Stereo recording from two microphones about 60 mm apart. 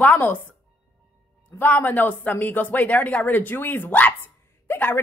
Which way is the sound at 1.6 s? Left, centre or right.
Left.